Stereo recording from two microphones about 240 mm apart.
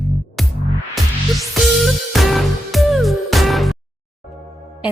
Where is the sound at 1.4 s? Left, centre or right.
Centre.